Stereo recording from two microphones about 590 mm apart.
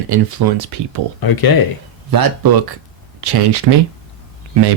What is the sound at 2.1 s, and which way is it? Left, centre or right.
Speech, right.